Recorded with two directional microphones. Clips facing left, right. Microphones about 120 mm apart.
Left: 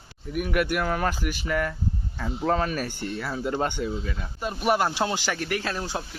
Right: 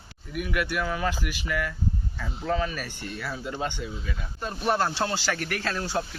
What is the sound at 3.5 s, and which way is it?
Speech, 50° left (ahead or behind).